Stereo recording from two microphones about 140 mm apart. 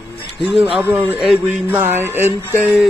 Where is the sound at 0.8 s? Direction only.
15° right (ahead or behind).